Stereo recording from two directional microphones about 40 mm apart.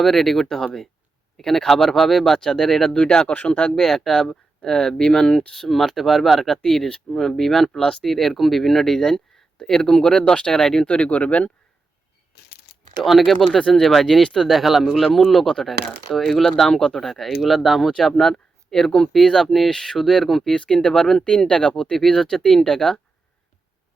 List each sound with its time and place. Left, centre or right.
0.0 s speech: centre
3.1 s speech: left
3.3 s speech: left
3.8 s speech: centre; by 5.3 s left
5.5 s speech: centre
6.6 s speech: centre
7.7 s speech: left
8.0 s speech: centre
10.8 s speech: left
13.0 s speech: centre
13.6 s speech: centre
14.5 s speech: centre
17.0 s speech: centre
20.5 s speech: left